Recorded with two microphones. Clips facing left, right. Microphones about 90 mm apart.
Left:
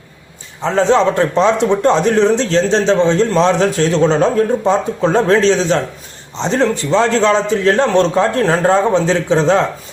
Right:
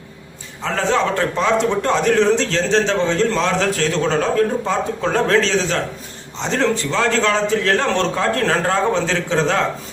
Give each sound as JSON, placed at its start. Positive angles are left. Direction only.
{"t": 0.6, "sound": "a man's voice", "side_deg": 25}